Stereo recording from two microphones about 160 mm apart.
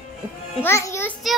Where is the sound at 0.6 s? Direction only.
15° left (ahead or behind).